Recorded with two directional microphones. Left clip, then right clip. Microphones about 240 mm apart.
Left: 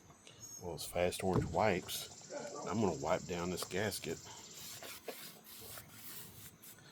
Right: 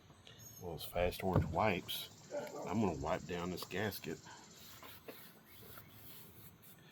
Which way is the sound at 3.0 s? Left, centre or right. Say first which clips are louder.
Left 3 dB; left.